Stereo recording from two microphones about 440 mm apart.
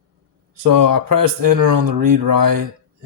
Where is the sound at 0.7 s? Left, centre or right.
Right.